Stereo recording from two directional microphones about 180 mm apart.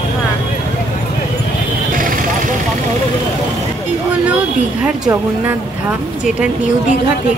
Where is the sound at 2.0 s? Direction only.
50° right (ahead or behind).